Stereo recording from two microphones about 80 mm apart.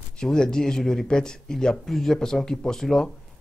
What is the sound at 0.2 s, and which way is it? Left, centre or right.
Speech, centre.